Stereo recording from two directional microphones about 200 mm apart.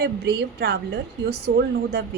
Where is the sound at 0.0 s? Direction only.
55° right (ahead or behind).